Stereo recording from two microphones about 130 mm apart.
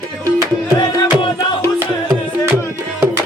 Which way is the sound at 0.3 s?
35° left (ahead or behind).